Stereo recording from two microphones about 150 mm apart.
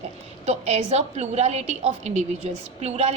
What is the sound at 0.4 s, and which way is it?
A woman's voice, 45° right (ahead or behind).